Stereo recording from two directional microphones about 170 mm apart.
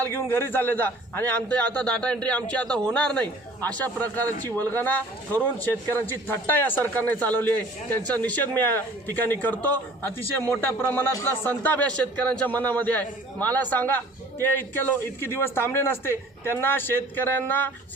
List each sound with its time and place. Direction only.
0.0 s a man's voice: 15° left (ahead or behind)